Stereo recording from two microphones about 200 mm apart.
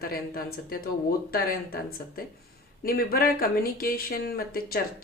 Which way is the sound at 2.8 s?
50° left (ahead or behind).